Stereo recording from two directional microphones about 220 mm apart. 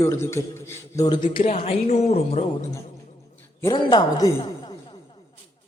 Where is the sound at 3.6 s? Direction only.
20° left (ahead or behind).